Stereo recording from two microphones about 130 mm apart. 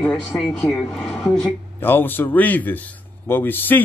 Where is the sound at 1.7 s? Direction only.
15° left (ahead or behind).